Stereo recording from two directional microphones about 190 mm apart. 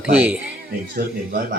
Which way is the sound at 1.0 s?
55° right (ahead or behind).